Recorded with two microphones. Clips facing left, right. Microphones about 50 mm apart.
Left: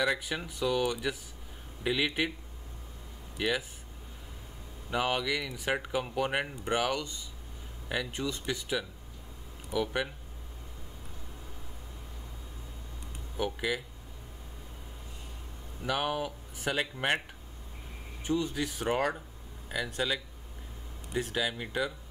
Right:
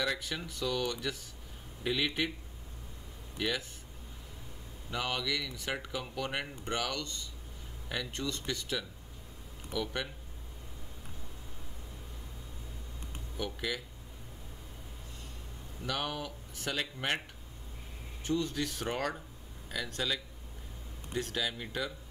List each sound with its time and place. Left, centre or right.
0.0 s speech: centre
3.3 s speech: centre
4.9 s speech: centre
13.4 s speech: centre
15.8 s speech: centre
18.2 s speech: centre